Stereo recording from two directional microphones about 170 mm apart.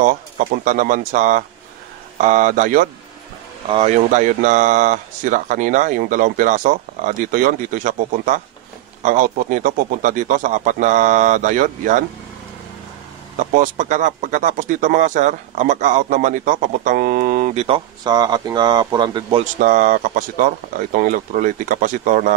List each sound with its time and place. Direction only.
0.0 s speech: 50° right (ahead or behind)
3.6 s speech: 35° right (ahead or behind)
4.1 s speech: 50° right (ahead or behind)
13.4 s speech: 50° right (ahead or behind)
17.6 s speech: 35° right (ahead or behind)
18.0 s a man's voice: 25° right (ahead or behind)
19.6 s speech: 50° right (ahead or behind)